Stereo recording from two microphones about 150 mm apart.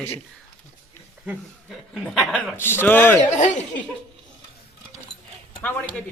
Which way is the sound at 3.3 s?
55° left (ahead or behind).